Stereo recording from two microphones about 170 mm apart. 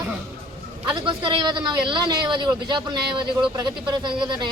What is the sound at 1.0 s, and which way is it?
A woman's voice, 30° right (ahead or behind).